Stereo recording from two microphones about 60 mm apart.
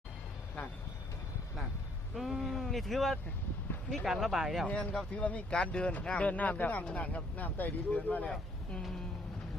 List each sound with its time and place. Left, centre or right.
2.1 s speech: centre
4.6 s speech: left